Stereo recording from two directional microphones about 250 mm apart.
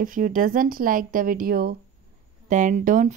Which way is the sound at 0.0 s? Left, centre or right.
Right.